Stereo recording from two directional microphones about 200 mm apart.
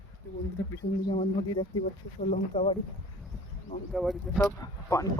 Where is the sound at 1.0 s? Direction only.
25° left (ahead or behind).